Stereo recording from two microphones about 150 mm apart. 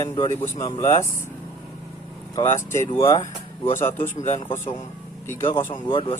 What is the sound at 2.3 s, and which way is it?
Speech, 20° left (ahead or behind).